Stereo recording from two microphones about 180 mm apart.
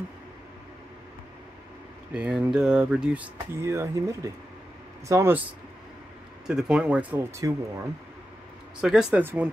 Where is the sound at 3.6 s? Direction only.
15° right (ahead or behind).